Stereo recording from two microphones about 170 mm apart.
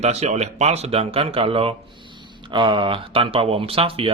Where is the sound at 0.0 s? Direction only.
40° right (ahead or behind).